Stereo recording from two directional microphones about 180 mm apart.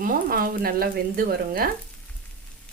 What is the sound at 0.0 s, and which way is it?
Speech, 55° right (ahead or behind).